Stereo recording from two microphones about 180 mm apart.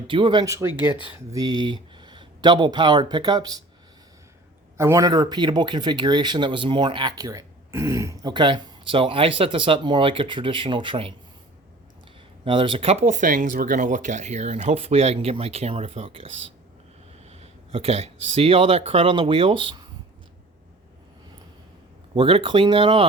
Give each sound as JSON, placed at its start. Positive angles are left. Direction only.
{"t": 0.1, "sound": "speech", "side_deg": -25}
{"t": 4.8, "sound": "speech", "side_deg": -15}
{"t": 12.5, "sound": "speech", "side_deg": -30}
{"t": 17.2, "sound": "speech", "side_deg": -35}
{"t": 22.1, "sound": "speech", "side_deg": -30}